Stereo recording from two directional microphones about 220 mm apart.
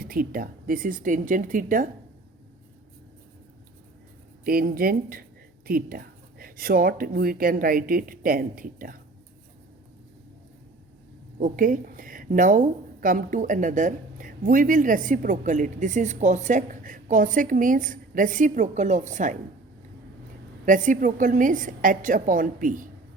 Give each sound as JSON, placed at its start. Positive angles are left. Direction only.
{"t": 0.0, "sound": "a woman's voice", "side_deg": -40}
{"t": 4.4, "sound": "a woman's voice", "side_deg": -40}
{"t": 11.3, "sound": "a woman's voice", "side_deg": -35}
{"t": 20.7, "sound": "a woman's voice", "side_deg": -35}